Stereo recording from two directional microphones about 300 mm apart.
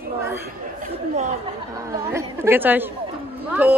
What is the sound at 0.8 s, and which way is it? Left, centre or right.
Chatter, right.